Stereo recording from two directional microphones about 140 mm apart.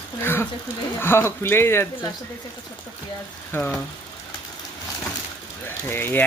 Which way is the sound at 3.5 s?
15° left (ahead or behind).